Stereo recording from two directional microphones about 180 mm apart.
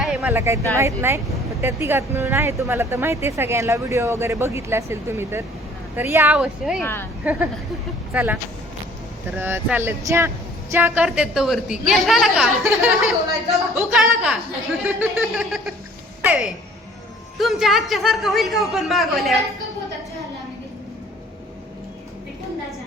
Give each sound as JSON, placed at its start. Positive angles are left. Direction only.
{"t": 0.0, "sound": "a sound", "side_deg": -5}
{"t": 0.3, "sound": "speech", "side_deg": -15}
{"t": 6.8, "sound": "a woman's voice", "side_deg": 10}
{"t": 7.3, "sound": "speech", "side_deg": -10}